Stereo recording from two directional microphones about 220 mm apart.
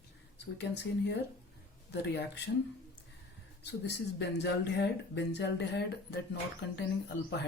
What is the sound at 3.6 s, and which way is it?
Speech, 50° left (ahead or behind).